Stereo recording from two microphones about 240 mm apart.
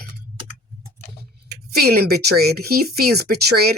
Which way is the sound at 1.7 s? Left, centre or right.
Right.